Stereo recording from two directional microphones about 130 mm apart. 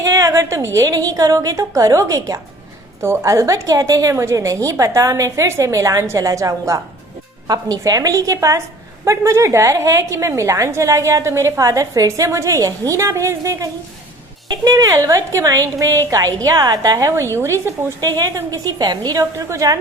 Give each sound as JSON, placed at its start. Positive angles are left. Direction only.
{"t": 0.0, "sound": "a woman's voice", "side_deg": -25}